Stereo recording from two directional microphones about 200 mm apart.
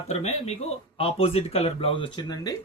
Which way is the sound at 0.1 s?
30° left (ahead or behind).